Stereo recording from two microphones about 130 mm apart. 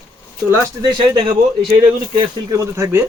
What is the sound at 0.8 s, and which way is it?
Speech, 35° right (ahead or behind).